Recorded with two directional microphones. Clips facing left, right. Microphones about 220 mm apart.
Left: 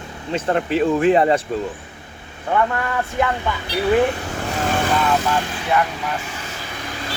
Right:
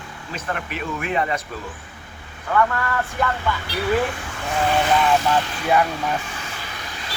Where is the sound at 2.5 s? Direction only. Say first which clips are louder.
Left 1 dB; 20° left (ahead or behind).